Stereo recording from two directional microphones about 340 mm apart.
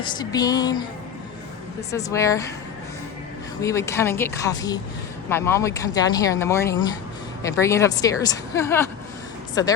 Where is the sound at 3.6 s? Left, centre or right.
Centre.